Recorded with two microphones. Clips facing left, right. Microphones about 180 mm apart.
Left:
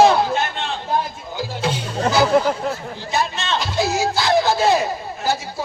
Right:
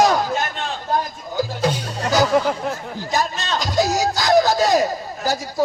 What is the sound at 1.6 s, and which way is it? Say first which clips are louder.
Speech: right 1 dB; 40° right (ahead or behind).